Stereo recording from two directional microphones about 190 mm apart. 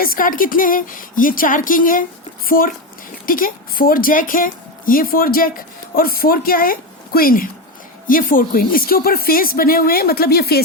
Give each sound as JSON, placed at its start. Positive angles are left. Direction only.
{"t": 0.0, "sound": "a woman's voice", "side_deg": 50}